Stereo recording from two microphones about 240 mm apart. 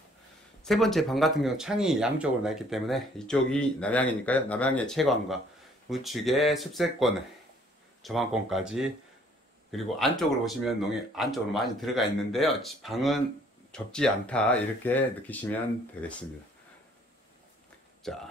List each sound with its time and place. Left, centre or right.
0.7 s speech: centre
18.0 s speech: centre